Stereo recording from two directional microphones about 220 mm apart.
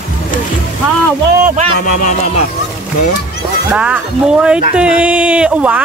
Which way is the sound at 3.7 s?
5° right (ahead or behind).